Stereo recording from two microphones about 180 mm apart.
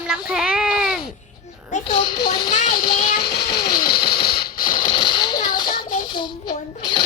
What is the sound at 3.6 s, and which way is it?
Mechanisms, 55° left (ahead or behind).